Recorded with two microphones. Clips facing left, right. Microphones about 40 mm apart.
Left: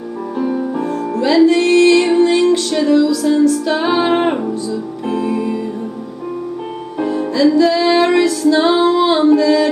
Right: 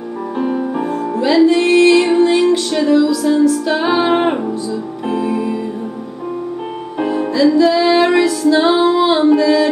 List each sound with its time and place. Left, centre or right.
0.7 s music: centre
7.3 s music: centre